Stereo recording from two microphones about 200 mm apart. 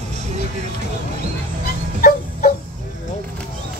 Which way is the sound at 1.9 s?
45° left (ahead or behind).